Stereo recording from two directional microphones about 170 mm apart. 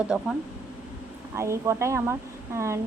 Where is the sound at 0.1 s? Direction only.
5° right (ahead or behind).